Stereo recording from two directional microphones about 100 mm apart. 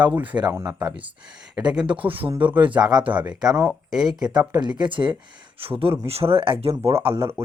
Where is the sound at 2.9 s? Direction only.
45° right (ahead or behind).